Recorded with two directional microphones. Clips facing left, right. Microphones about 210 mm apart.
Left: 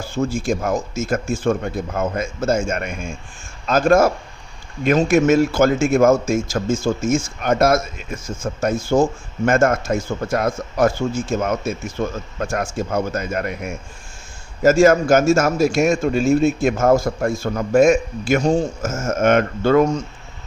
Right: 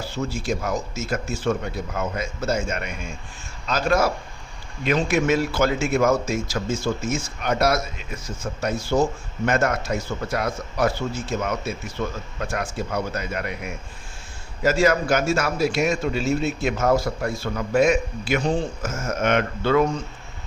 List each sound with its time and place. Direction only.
0.0 s a man's voice: 50° left (ahead or behind)